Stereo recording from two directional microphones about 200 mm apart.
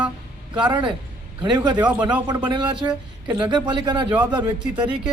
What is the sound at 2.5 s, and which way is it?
A man's voice, 20° right (ahead or behind).